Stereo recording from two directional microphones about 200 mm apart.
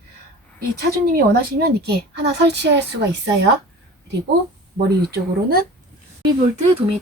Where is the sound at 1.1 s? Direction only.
55° right (ahead or behind).